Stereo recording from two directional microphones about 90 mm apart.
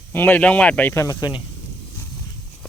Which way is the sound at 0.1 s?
20° left (ahead or behind).